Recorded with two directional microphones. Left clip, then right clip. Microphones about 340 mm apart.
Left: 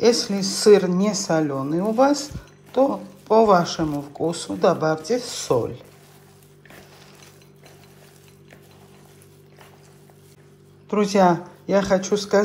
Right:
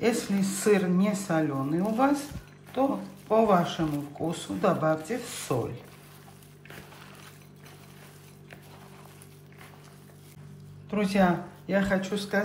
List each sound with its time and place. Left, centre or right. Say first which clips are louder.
0.0 s speech: left 9 dB; centre
3.3 s speech: left 7 dB; centre
10.9 s speech: left 8 dB; centre